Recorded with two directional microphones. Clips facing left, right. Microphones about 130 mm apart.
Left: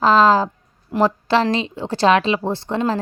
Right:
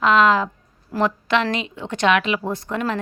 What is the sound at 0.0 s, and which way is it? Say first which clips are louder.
A woman's voice: left 3 dB; 35° left (ahead or behind).